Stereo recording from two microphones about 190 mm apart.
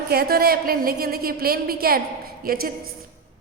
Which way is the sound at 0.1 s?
55° right (ahead or behind).